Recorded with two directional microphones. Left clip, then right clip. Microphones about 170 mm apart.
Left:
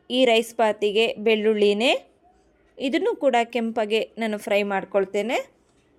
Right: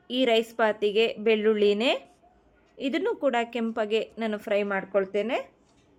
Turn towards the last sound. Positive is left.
turn(degrees=45)  # may be behind; listen again after turning